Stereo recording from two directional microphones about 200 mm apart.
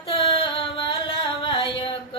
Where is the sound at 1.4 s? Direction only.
25° left (ahead or behind).